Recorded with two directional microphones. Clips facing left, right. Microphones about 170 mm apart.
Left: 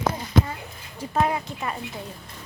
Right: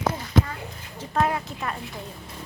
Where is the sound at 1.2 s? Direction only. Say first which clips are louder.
Even; 5° left (ahead or behind).